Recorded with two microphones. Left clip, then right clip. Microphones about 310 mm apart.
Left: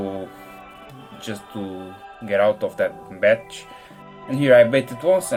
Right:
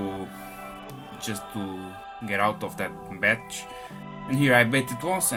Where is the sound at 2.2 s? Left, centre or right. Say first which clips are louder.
Left 7 dB; centre.